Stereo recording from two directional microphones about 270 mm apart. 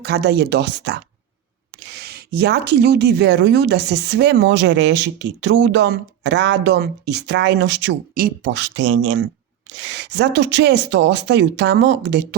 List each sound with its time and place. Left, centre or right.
0.0 s speech: right